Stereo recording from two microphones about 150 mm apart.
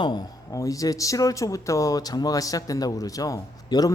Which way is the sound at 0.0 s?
25° left (ahead or behind).